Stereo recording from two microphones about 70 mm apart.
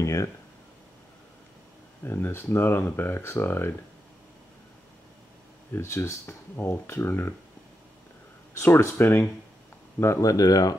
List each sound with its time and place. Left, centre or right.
0.0 s speech: left
2.0 s speech: left
5.7 s speech: left
8.5 s speech: left
9.9 s speech: left